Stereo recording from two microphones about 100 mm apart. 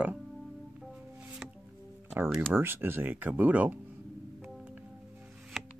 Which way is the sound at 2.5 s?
20° right (ahead or behind).